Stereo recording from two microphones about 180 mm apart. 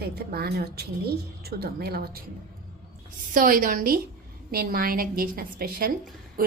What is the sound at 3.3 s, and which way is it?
A woman's voice, 50° right (ahead or behind).